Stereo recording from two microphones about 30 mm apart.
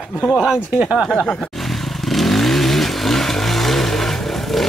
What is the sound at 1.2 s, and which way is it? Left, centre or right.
Speech, left.